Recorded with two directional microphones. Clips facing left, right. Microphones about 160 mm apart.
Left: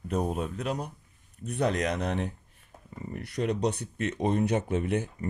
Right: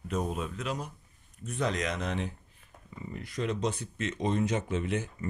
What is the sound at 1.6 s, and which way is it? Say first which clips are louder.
Speech: left 4 dB; 55° left (ahead or behind).